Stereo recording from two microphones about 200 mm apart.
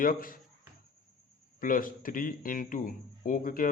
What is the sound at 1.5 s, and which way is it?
A man's voice, 45° left (ahead or behind).